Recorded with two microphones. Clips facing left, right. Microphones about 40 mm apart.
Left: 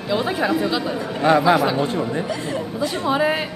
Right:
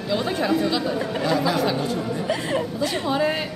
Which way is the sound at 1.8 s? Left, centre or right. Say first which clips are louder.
Left 3 dB; left.